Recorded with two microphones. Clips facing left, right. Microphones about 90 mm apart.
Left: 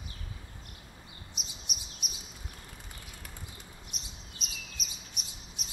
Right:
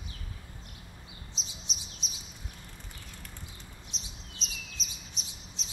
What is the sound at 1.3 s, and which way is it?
Chirp, 55° left (ahead or behind).